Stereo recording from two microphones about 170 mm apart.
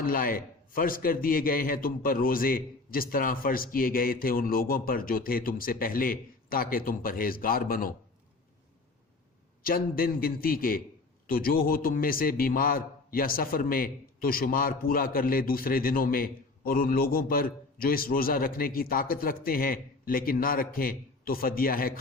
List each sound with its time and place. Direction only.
0.0 s a man's voice: 60° left (ahead or behind)
9.6 s a man's voice: 60° left (ahead or behind)